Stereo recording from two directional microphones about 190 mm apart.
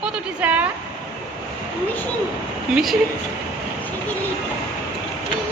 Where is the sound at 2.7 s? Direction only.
Centre (ahead or behind).